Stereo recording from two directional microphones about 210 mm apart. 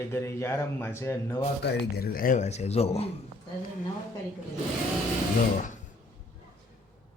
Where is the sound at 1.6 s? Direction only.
50° left (ahead or behind); by 3.1 s 30° left (ahead or behind).